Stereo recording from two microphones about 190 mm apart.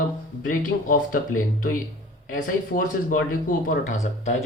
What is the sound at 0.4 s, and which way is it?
Speech, 45° left (ahead or behind).